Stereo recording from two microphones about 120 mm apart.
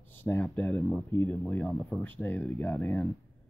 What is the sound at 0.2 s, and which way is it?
Speech, 15° left (ahead or behind).